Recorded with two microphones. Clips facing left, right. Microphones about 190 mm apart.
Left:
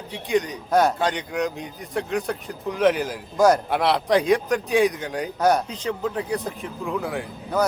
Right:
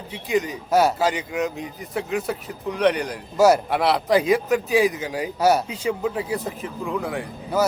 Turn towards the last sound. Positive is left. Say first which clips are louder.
# right 1 dB
turn(degrees=0)  # may be behind; listen again after turning